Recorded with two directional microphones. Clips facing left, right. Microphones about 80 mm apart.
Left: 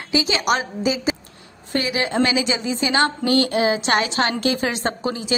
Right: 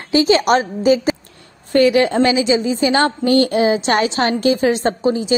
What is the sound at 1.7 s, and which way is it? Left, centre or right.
Speech, right.